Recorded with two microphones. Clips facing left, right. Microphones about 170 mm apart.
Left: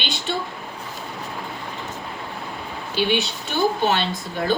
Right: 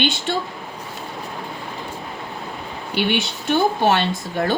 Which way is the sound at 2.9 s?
60° right (ahead or behind).